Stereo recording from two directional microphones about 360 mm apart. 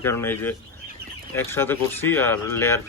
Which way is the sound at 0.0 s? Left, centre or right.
Centre.